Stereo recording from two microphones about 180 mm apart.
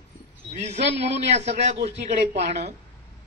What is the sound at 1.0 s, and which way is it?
Speech, 40° right (ahead or behind).